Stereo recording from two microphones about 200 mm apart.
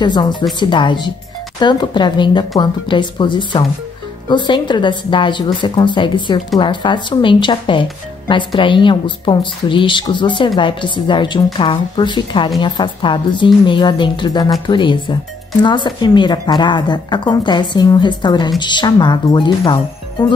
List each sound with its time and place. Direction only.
0.0 s speech: 20° left (ahead or behind)